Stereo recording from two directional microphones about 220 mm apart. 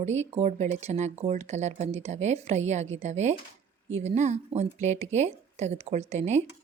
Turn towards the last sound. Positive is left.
turn(degrees=-30)  # may be behind; listen again after turning